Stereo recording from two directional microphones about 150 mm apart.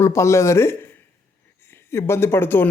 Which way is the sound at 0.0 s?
20° left (ahead or behind).